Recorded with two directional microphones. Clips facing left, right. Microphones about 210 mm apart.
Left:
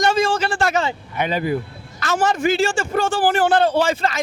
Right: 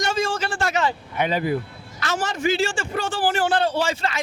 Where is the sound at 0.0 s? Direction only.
70° left (ahead or behind).